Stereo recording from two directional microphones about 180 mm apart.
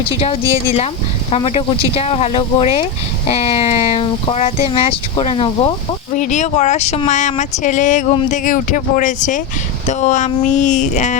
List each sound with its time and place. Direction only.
1.3 s speech: 35° left (ahead or behind)
6.1 s speech: 45° left (ahead or behind)